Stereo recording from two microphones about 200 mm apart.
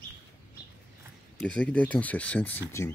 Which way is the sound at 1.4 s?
5° left (ahead or behind).